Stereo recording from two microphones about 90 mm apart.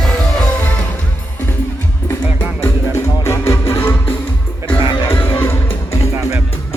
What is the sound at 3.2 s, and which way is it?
Music, 30° left (ahead or behind).